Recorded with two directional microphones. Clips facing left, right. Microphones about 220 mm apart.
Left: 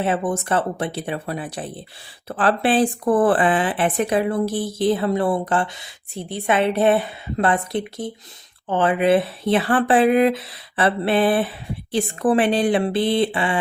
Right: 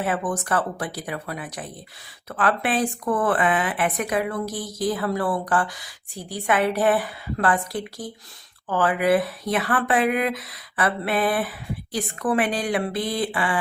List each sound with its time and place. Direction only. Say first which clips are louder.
0.0 s speech: left 4 dB; 25° left (ahead or behind)